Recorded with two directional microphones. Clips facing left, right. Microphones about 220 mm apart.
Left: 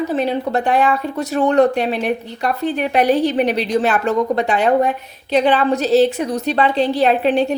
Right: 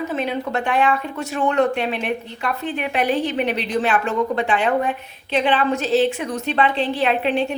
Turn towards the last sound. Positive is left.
turn(degrees=40)  # may be behind; listen again after turning